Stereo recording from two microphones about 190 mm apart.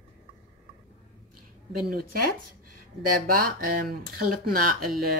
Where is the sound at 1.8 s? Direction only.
50° right (ahead or behind).